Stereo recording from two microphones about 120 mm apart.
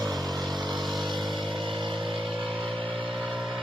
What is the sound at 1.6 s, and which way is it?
Vehicle, 45° right (ahead or behind).